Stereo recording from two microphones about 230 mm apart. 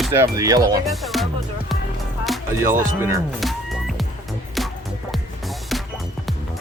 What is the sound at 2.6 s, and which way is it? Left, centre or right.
Speech, centre.